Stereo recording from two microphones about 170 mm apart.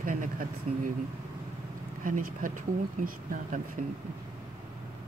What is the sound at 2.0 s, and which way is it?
Speech, 50° right (ahead or behind).